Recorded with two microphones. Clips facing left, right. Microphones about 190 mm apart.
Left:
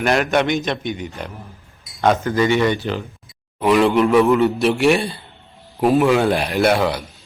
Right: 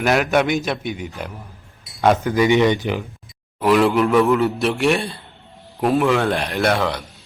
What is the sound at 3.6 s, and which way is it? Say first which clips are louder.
A man's voice: left 1 dB; centre (ahead or behind).